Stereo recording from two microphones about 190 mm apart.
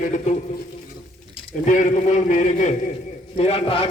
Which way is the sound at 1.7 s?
40° left (ahead or behind).